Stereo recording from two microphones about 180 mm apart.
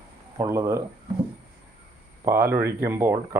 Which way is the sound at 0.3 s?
15° right (ahead or behind).